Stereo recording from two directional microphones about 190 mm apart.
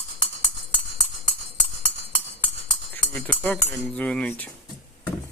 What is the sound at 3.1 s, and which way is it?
Speech, 10° left (ahead or behind).